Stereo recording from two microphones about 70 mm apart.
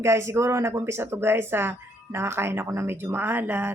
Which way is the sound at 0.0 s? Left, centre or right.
Right.